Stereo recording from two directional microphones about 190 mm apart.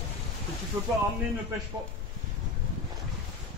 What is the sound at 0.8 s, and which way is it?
Speech, 10° right (ahead or behind).